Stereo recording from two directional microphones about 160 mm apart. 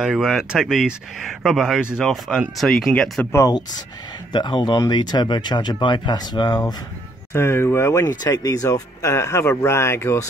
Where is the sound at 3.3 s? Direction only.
20° left (ahead or behind).